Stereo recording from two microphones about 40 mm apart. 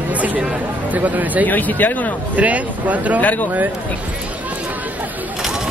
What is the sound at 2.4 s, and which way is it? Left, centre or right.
Speech, right.